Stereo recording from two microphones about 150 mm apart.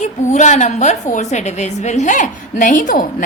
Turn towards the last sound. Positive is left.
turn(degrees=60)  # may be behind; listen again after turning